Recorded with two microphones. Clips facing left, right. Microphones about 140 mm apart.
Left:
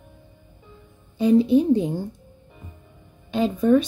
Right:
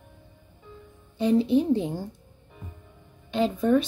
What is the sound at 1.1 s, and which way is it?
Speech, 10° left (ahead or behind).